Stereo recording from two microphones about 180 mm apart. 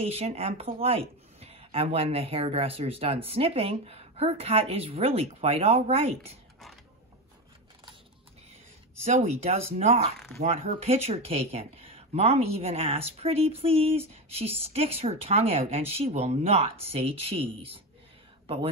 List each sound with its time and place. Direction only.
0.0 s speech: 35° right (ahead or behind)
9.0 s speech: 35° right (ahead or behind)